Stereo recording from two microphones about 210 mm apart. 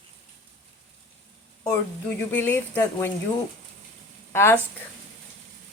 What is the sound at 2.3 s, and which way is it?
Speech, 10° left (ahead or behind).